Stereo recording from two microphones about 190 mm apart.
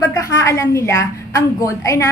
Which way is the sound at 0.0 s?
15° left (ahead or behind).